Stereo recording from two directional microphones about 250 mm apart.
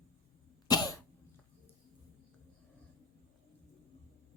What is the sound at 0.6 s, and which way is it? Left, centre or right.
Cough, centre.